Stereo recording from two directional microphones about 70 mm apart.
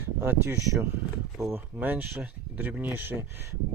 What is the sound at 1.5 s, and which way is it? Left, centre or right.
Speech, right.